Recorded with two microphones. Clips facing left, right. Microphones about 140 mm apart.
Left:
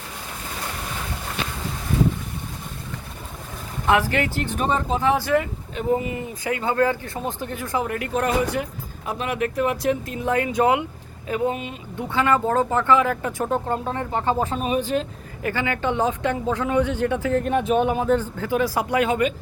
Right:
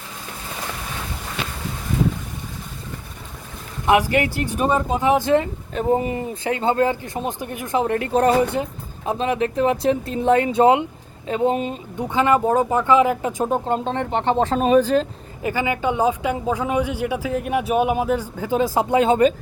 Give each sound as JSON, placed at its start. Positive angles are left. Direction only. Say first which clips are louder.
{"t": 3.8, "sound": "speech", "louder": "right 3 dB", "side_deg": -15}
{"t": 5.7, "sound": "speech", "louder": "right 3 dB", "side_deg": -35}
{"t": 11.9, "sound": "speech", "louder": "right 3 dB", "side_deg": -20}
{"t": 14.5, "sound": "speech", "louder": "right 7 dB", "side_deg": -40}
{"t": 15.4, "sound": "speech", "louder": "right 2 dB", "side_deg": -15}
{"t": 18.5, "sound": "speech", "louder": "right 3 dB", "side_deg": -25}